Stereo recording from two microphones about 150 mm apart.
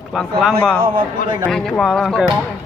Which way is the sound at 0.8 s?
35° right (ahead or behind).